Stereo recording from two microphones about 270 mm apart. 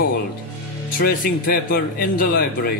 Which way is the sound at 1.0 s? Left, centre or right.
Left.